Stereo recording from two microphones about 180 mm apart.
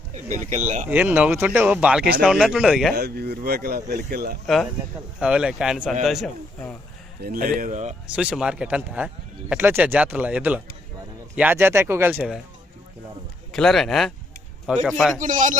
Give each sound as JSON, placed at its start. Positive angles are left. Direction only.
{"t": 0.1, "sound": "speech", "side_deg": -45}
{"t": 0.9, "sound": "a man's voice", "side_deg": -10}
{"t": 2.9, "sound": "speech", "side_deg": -60}
{"t": 4.4, "sound": "a man's voice", "side_deg": 0}
{"t": 7.2, "sound": "speech", "side_deg": -55}
{"t": 8.1, "sound": "speech", "side_deg": -5}
{"t": 13.5, "sound": "a man's voice", "side_deg": 0}
{"t": 15.2, "sound": "speech", "side_deg": -45}